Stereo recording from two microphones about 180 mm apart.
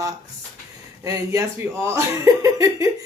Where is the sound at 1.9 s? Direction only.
15° right (ahead or behind).